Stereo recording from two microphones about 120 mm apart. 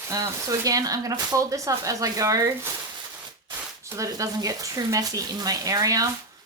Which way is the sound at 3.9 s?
25° right (ahead or behind).